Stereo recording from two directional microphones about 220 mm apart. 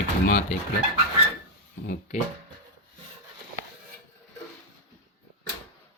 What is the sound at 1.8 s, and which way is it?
Speech, 40° left (ahead or behind).